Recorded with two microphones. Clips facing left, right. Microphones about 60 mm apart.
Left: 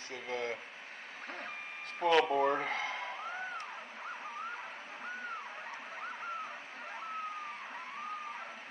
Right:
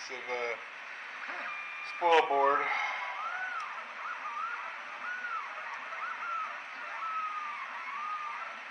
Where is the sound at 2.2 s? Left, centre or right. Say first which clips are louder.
Right 3 dB; right.